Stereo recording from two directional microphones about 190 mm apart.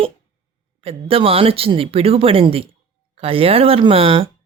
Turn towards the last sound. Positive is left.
turn(degrees=-30)  # may be behind; listen again after turning